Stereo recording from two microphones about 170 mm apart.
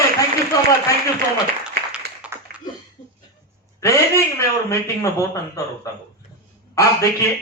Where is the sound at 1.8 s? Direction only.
70° right (ahead or behind).